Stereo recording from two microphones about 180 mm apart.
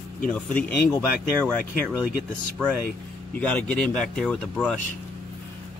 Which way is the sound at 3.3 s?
10° left (ahead or behind).